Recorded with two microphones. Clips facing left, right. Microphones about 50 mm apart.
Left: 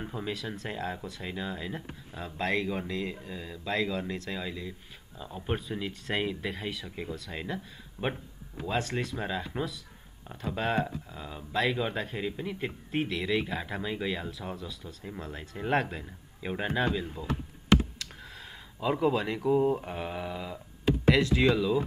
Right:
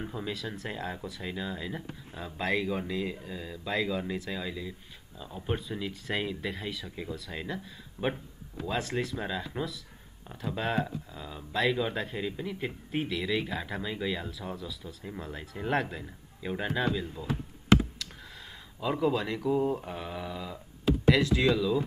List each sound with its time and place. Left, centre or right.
0.0 s speech: centre
0.3 s speech: centre
16.4 s speech: centre
17.9 s speech: centre
21.5 s speech: centre